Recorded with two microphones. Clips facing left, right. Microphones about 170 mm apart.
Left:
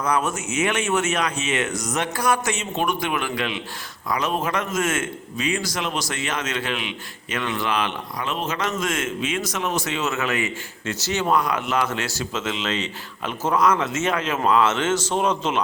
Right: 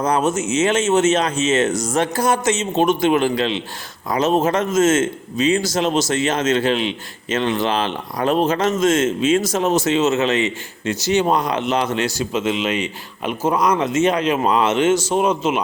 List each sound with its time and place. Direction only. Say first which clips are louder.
0.1 s a man's voice: right 3 dB; 20° right (ahead or behind)